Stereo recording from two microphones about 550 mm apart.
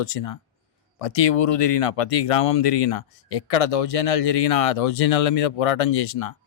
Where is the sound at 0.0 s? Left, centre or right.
Left.